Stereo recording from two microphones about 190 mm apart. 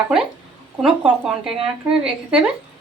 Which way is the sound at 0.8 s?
5° right (ahead or behind).